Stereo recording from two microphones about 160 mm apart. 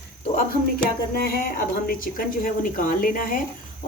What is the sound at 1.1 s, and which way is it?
A woman's voice, 75° left (ahead or behind).